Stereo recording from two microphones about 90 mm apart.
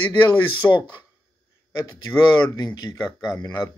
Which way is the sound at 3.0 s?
5° right (ahead or behind).